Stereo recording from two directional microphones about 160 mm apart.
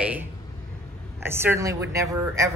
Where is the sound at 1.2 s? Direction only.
15° right (ahead or behind).